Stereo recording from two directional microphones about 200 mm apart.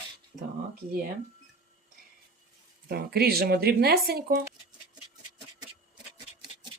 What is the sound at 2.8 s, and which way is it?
Speech, 50° right (ahead or behind).